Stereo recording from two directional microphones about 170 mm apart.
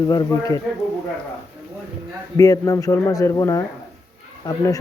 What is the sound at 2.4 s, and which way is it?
Speech, 20° left (ahead or behind).